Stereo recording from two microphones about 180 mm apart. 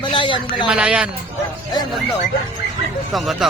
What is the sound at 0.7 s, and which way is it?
Speech, 5° right (ahead or behind).